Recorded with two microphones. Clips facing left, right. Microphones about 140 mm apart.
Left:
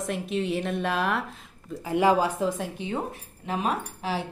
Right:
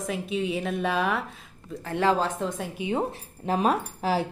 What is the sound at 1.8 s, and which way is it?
Speech, 10° left (ahead or behind).